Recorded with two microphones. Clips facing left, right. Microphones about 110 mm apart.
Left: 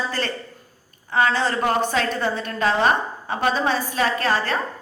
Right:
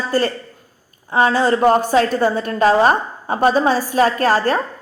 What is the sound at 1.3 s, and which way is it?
A woman's voice, 40° right (ahead or behind).